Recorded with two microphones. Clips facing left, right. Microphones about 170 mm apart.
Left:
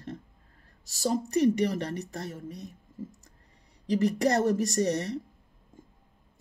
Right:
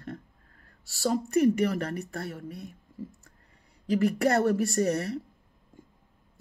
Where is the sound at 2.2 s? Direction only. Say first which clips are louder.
Right 1 dB; 40° left (ahead or behind).